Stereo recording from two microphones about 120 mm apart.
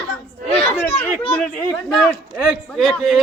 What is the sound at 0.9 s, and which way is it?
A man's voice, 10° left (ahead or behind).